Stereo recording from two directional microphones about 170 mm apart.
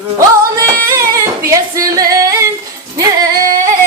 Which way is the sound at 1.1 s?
20° right (ahead or behind).